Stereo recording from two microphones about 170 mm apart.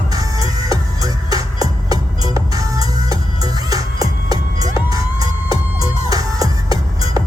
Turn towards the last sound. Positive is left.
turn(degrees=-20)  # may be behind; listen again after turning